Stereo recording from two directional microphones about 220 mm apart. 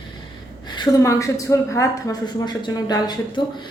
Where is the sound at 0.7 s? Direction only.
15° left (ahead or behind).